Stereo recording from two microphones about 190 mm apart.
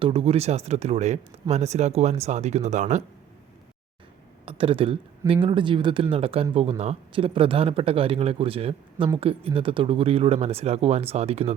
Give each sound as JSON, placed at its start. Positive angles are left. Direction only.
{"t": 0.0, "sound": "speech", "side_deg": -30}
{"t": 4.4, "sound": "speech", "side_deg": -30}